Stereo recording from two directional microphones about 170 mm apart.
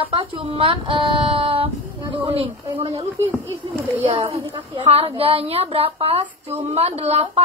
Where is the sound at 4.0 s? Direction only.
35° right (ahead or behind).